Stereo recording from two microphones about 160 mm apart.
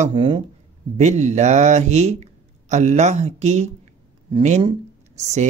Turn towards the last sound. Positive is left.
turn(degrees=-45)  # may be behind; listen again after turning